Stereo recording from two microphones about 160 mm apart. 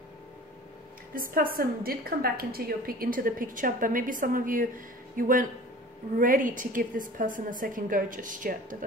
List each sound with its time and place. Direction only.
1.1 s a woman's voice: 65° right (ahead or behind)